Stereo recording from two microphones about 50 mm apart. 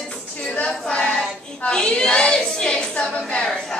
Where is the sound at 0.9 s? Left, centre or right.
Centre.